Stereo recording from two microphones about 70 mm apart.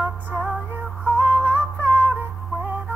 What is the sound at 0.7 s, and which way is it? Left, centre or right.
Synthetic singing, right.